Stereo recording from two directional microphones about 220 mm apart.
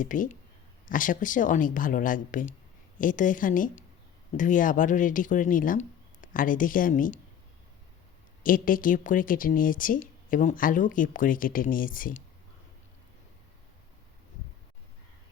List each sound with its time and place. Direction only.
0.0 s speech: 35° left (ahead or behind)
8.4 s speech: 40° left (ahead or behind)